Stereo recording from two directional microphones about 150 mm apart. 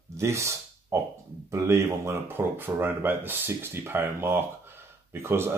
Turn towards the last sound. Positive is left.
turn(degrees=-15)  # may be behind; listen again after turning